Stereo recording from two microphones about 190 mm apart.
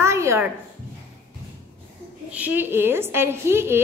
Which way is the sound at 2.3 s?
10° right (ahead or behind).